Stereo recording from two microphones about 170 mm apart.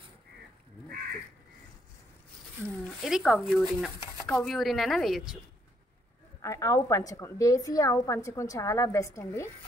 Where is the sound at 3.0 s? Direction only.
Centre (ahead or behind).